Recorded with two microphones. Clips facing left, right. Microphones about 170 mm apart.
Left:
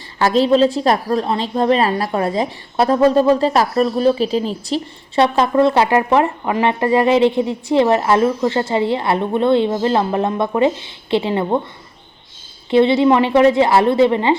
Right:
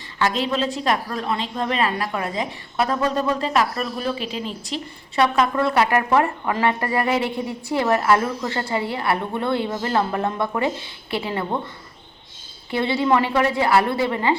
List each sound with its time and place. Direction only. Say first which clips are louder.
0.2 s a woman's voice: left 9 dB; 35° left (ahead or behind)
12.7 s a woman's voice: left 8 dB; 20° left (ahead or behind)